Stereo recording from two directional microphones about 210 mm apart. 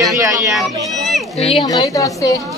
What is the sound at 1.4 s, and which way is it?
Speech, 30° left (ahead or behind).